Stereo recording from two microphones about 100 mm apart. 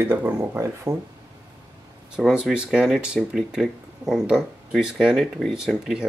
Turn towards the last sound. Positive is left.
turn(degrees=0)  # may be behind; listen again after turning